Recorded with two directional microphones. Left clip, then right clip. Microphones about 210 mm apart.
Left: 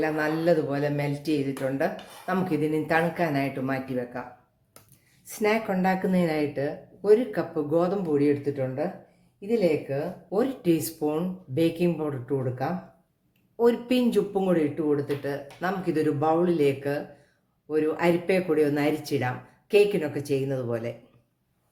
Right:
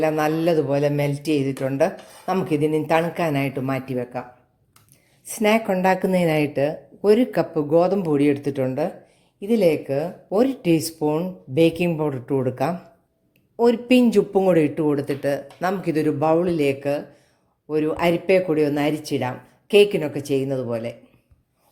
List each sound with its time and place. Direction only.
0.0 s a man's voice: 35° right (ahead or behind)
5.2 s a man's voice: 30° right (ahead or behind); by 10.0 s 50° right (ahead or behind)
10.2 s a man's voice: 35° right (ahead or behind)
13.6 s speech: 30° right (ahead or behind)
14.8 s a man's voice: 45° right (ahead or behind); by 20.9 s 25° right (ahead or behind)